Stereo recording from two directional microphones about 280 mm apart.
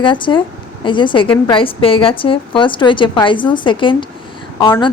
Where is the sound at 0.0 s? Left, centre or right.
Centre.